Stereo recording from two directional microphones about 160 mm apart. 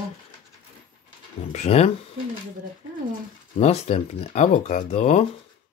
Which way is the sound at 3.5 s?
40° left (ahead or behind).